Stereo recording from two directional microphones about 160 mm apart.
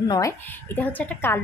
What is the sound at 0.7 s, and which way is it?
Speech, 15° left (ahead or behind).